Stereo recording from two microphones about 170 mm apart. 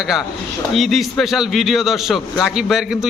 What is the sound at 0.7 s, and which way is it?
A man's voice, centre (ahead or behind).